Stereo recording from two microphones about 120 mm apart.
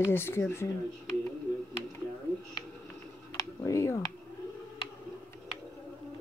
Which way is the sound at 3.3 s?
25° left (ahead or behind).